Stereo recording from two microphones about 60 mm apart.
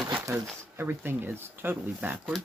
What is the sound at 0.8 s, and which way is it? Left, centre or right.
Speech, right.